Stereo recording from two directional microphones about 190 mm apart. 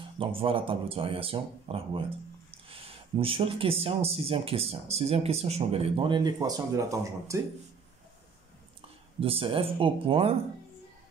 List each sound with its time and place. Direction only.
0.2 s speech: 30° right (ahead or behind)
9.2 s speech: 30° right (ahead or behind)